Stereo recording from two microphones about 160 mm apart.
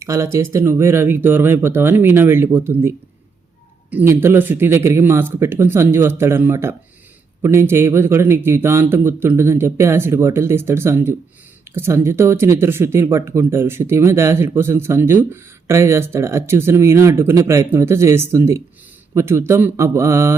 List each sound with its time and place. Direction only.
0.0 s speech: 20° right (ahead or behind)